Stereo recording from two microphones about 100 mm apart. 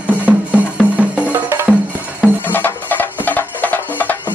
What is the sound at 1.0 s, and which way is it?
Music, 15° right (ahead or behind).